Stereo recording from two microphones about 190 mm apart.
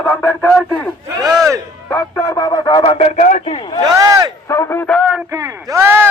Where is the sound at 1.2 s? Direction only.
20° right (ahead or behind).